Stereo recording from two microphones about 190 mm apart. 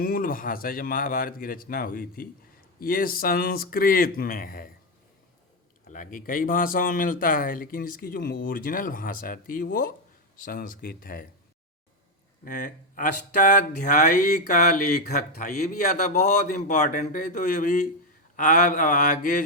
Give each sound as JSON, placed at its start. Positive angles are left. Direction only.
{"t": 0.0, "sound": "speech", "side_deg": 50}
{"t": 5.9, "sound": "speech", "side_deg": 45}
{"t": 12.5, "sound": "speech", "side_deg": 45}